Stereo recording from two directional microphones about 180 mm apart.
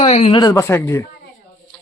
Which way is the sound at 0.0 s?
30° left (ahead or behind).